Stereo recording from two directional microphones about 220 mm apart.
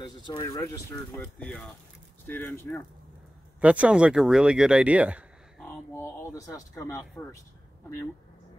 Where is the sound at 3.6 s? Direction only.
5° right (ahead or behind).